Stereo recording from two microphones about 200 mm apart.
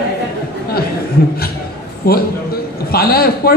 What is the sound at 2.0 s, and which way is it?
A man's voice, 50° left (ahead or behind).